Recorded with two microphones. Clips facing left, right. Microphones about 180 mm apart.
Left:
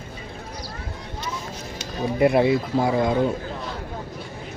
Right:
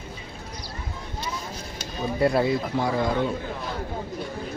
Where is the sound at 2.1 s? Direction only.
20° left (ahead or behind).